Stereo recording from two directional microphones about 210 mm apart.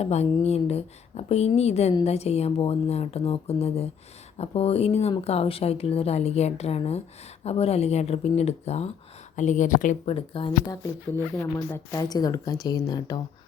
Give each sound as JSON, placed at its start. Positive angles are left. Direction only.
{"t": 0.0, "sound": "a woman's voice", "side_deg": 30}
{"t": 11.3, "sound": "speech", "side_deg": 15}